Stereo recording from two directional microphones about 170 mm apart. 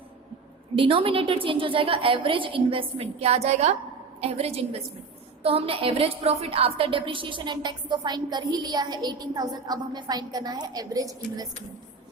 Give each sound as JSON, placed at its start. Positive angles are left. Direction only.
{"t": 0.8, "sound": "a woman's voice", "side_deg": -30}